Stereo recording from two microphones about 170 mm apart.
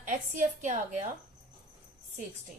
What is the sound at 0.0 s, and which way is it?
A woman's voice, 50° right (ahead or behind).